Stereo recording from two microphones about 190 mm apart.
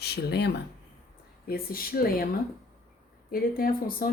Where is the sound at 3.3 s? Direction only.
50° left (ahead or behind).